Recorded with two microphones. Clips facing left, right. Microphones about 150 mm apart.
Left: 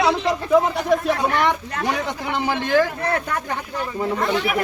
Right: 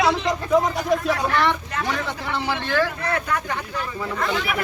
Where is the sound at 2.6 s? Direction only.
15° left (ahead or behind).